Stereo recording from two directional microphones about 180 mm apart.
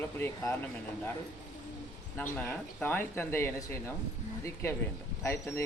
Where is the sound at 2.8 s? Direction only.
10° left (ahead or behind).